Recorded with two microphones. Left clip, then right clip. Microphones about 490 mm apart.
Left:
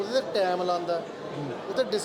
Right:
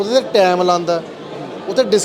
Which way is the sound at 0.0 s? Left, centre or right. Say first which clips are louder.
Right 13 dB; right.